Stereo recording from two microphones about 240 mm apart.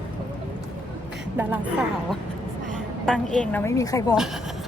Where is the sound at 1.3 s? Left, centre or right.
Centre.